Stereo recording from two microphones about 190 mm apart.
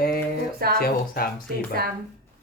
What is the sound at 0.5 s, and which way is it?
Speech, 55° right (ahead or behind).